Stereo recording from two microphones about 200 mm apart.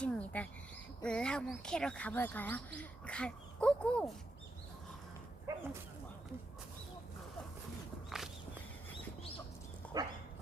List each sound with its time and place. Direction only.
0.0 s bird: 5° left (ahead or behind)
1.0 s speech: 5° left (ahead or behind)
5.5 s dog: 15° right (ahead or behind)
9.9 s dog: 20° right (ahead or behind)